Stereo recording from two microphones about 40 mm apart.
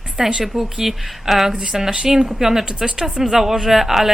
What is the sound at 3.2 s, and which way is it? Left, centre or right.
Speech, centre.